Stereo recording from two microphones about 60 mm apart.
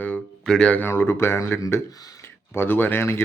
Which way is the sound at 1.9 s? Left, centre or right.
Left.